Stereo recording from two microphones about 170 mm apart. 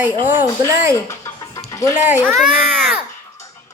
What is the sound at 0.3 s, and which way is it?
Speech, 10° right (ahead or behind).